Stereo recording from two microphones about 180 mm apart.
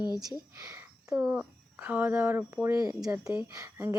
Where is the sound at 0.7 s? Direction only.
15° right (ahead or behind).